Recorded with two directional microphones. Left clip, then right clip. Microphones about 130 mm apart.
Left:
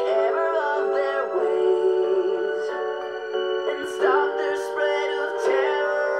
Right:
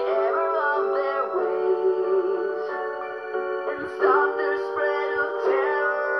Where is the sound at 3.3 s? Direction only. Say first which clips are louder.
Left 3 dB; 40° left (ahead or behind).